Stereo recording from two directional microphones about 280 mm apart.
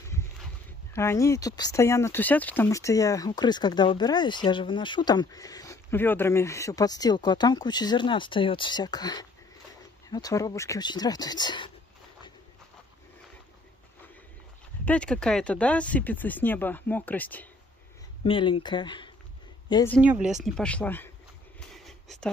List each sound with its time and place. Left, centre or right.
0.9 s speech: centre
14.9 s speech: centre
18.2 s speech: centre
20.0 s speech: centre
21.5 s a sound: centre